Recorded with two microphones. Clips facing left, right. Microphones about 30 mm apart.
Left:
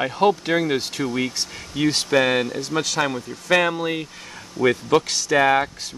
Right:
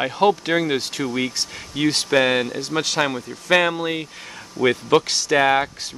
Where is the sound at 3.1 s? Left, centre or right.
Centre.